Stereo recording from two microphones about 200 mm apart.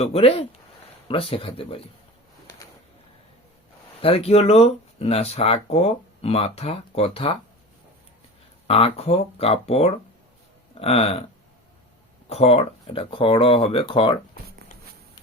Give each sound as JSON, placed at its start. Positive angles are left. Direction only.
{"t": 0.0, "sound": "speech", "side_deg": 30}
{"t": 4.0, "sound": "speech", "side_deg": 30}
{"t": 8.6, "sound": "speech", "side_deg": 30}
{"t": 12.3, "sound": "speech", "side_deg": 30}